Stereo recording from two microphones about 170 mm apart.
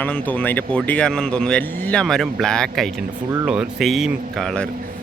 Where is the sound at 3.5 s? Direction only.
Centre (ahead or behind).